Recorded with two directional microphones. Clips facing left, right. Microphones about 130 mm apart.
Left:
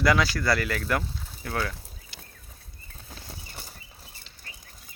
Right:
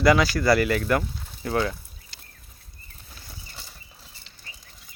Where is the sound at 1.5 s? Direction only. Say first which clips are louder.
Right 6 dB; 20° right (ahead or behind).